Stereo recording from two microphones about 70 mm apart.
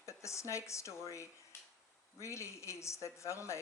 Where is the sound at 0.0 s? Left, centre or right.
Left.